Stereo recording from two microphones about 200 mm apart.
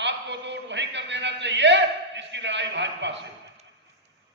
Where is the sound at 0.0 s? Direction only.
60° right (ahead or behind).